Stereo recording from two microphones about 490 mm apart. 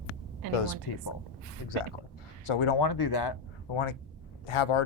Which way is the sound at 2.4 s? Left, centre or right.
Left.